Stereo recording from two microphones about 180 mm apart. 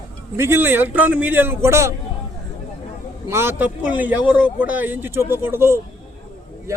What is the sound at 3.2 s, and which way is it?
A man's voice, 15° right (ahead or behind).